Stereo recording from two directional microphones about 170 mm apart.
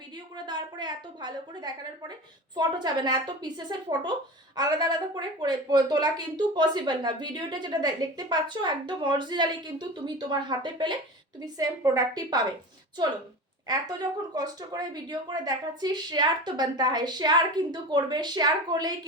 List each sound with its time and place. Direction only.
0.3 s a woman's voice: 25° right (ahead or behind)
13.7 s speech: 25° right (ahead or behind)